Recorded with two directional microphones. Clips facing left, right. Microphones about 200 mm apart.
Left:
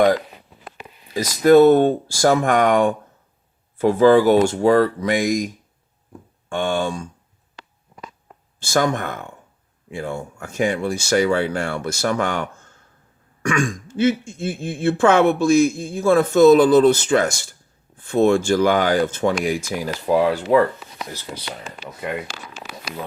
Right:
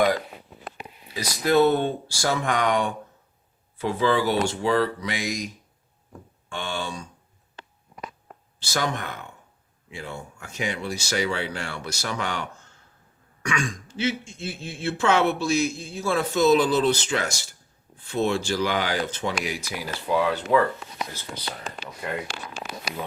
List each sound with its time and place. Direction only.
1.1 s speech: 45° left (ahead or behind)
6.5 s speech: 50° left (ahead or behind)
8.5 s speech: 50° left (ahead or behind)
20.8 s a sound: 5° left (ahead or behind)